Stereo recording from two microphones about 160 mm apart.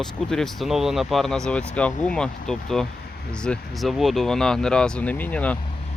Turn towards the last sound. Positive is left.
turn(degrees=10)  # may be behind; listen again after turning